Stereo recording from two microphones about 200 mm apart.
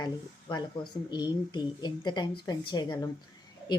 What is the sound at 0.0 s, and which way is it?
A woman's voice, 20° left (ahead or behind).